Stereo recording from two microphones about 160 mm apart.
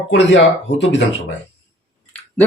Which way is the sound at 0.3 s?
90° left.